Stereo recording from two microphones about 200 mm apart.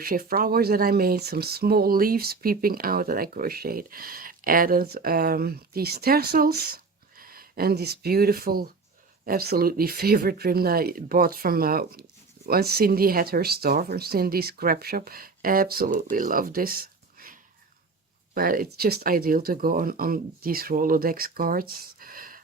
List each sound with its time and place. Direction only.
0.0 s speech: 45° right (ahead or behind)
18.3 s speech: 45° right (ahead or behind)